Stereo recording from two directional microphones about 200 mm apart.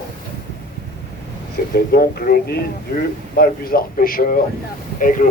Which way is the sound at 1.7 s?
50° left (ahead or behind).